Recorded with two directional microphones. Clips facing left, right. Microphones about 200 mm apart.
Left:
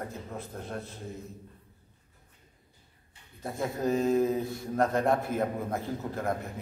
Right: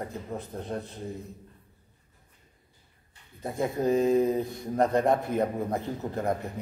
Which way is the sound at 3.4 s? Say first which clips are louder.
Right 3 dB; 20° right (ahead or behind).